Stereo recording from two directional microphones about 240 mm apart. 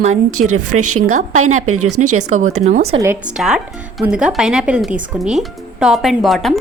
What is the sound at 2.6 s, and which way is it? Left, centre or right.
Speech, right.